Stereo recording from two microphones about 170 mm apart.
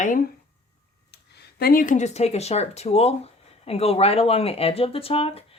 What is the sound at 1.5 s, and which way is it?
Speech, 60° left (ahead or behind).